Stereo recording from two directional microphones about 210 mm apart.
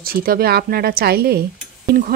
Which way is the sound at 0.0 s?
45° right (ahead or behind).